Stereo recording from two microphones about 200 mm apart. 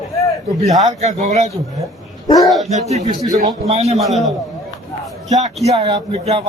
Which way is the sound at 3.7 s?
30° right (ahead or behind).